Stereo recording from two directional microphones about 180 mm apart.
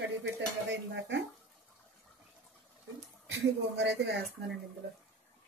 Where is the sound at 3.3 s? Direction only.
75° right (ahead or behind).